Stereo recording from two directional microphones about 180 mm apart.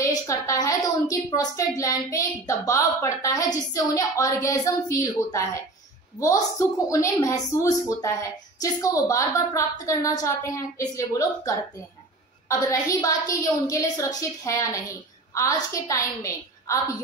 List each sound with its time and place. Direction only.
0.0 s a woman's voice: 15° left (ahead or behind)